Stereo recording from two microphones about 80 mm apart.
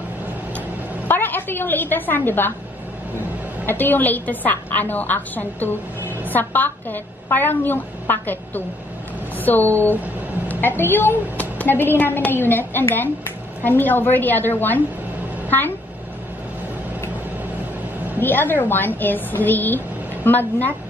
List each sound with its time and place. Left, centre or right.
1.0 s a woman's voice: left
3.6 s a woman's voice: left
18.2 s a woman's voice: left